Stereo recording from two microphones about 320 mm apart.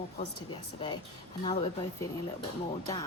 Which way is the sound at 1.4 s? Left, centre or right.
Centre.